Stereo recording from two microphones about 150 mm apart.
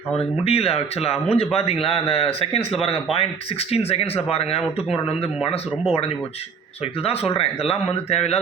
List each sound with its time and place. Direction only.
0.2 s speech: 40° left (ahead or behind)
7.0 s speech: 40° left (ahead or behind)